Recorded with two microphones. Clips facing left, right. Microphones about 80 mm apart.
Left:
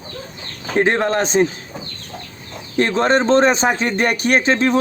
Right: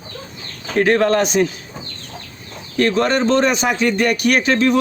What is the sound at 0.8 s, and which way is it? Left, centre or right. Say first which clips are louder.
Speech: right 2 dB; left.